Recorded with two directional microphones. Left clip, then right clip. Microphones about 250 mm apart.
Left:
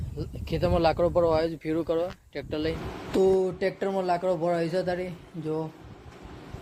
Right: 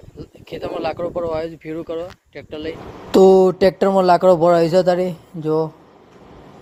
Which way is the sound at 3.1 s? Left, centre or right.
Right.